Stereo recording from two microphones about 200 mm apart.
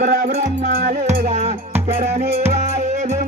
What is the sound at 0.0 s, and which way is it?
Music, 50° right (ahead or behind).